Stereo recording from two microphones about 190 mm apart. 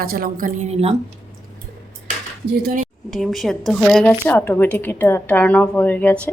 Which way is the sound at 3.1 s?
Centre (ahead or behind).